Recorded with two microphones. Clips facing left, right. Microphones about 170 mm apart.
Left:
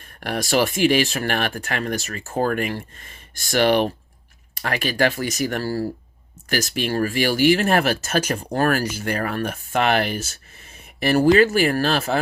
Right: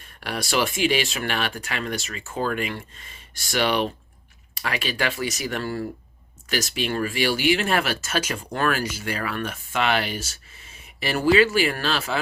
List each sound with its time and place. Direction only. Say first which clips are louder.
0.2 s speech: left 4 dB; 45° left (ahead or behind)